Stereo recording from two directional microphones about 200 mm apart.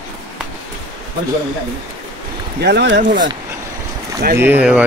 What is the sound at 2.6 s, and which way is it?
Speech, 55° right (ahead or behind).